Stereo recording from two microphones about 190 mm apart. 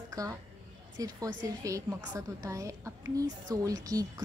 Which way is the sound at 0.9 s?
20° right (ahead or behind).